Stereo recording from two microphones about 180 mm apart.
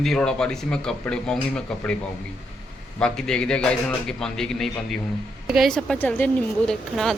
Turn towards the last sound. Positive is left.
turn(degrees=0)  # may be behind; listen again after turning